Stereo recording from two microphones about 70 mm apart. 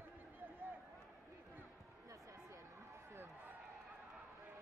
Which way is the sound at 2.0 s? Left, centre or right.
Right.